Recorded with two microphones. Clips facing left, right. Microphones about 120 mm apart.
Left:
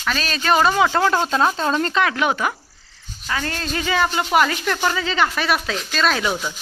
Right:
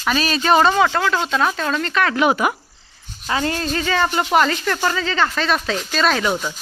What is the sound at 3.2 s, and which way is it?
Speech, 25° right (ahead or behind).